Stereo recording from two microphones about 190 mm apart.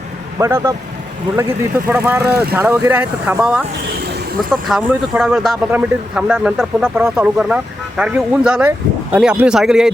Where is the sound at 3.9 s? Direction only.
60° right (ahead or behind).